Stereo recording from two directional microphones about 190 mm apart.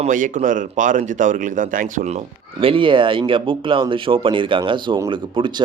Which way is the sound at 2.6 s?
25° right (ahead or behind).